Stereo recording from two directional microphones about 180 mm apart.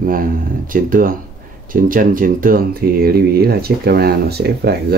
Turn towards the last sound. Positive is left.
turn(degrees=-60)  # may be behind; listen again after turning